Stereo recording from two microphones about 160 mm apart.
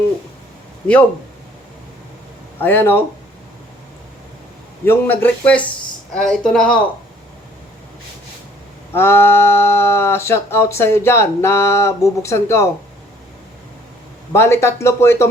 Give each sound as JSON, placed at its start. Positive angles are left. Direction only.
{"t": 2.6, "sound": "speech", "side_deg": 15}
{"t": 4.9, "sound": "speech", "side_deg": 10}
{"t": 9.0, "sound": "speech", "side_deg": 15}
{"t": 14.3, "sound": "speech", "side_deg": 15}